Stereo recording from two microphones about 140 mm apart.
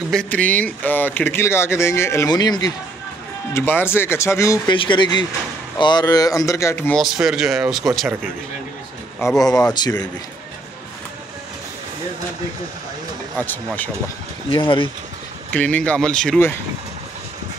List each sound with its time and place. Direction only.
0.1 s speech: 10° left (ahead or behind); by 2.7 s 30° left (ahead or behind)
3.5 s speech: 15° left (ahead or behind)
4.6 s speech: 35° left (ahead or behind); by 6.9 s 20° left (ahead or behind)
6.9 s speech: centre (ahead or behind)
9.5 s speech: 5° left (ahead or behind)
9.8 s speech: 30° left (ahead or behind)
13.4 s speech: 10° left (ahead or behind)
14.5 s speech: 35° left (ahead or behind)
15.5 s speech: 10° left (ahead or behind)